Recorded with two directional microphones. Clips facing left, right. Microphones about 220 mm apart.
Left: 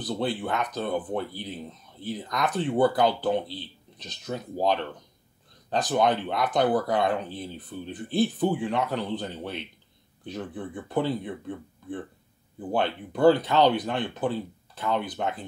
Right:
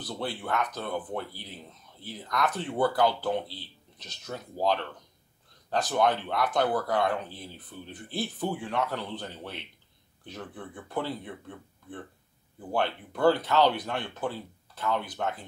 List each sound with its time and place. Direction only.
0.0 s speech: 15° left (ahead or behind)
12.7 s speech: 15° left (ahead or behind)